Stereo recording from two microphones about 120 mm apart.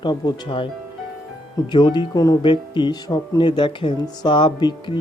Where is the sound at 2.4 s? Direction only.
40° left (ahead or behind).